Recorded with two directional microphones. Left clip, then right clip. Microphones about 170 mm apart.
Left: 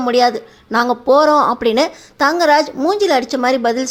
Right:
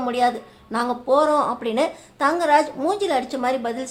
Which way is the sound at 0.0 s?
30° left (ahead or behind).